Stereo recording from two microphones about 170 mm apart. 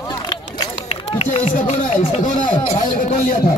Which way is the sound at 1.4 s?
40° left (ahead or behind).